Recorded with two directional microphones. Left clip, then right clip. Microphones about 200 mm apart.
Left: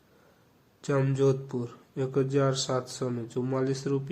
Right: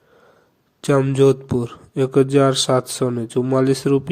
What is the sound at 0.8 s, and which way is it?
Speech, 40° right (ahead or behind).